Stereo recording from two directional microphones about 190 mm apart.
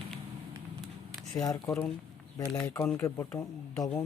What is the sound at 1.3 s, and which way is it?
Speech, 20° left (ahead or behind).